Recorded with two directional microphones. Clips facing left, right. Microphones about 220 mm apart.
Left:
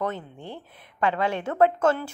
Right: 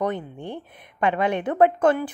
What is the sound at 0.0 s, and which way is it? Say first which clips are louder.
A woman's voice: right 4 dB; 15° right (ahead or behind).